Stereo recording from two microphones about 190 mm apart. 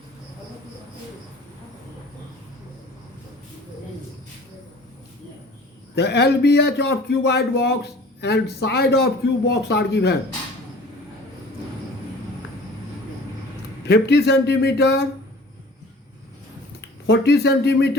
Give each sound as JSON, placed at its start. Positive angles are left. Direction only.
{"t": 6.0, "sound": "a man's voice", "side_deg": 60}
{"t": 13.8, "sound": "a man's voice", "side_deg": 65}
{"t": 17.1, "sound": "a man's voice", "side_deg": 65}